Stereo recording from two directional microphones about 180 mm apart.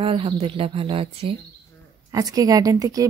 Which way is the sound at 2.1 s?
20° right (ahead or behind).